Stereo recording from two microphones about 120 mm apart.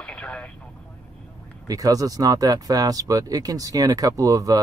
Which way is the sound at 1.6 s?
30° right (ahead or behind).